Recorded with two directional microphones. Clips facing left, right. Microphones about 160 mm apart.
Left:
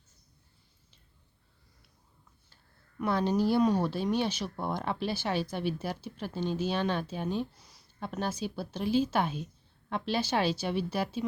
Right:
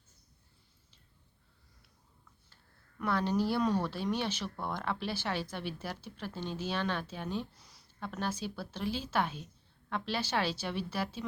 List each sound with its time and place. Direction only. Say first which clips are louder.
3.0 s speech: left 3 dB; 15° left (ahead or behind)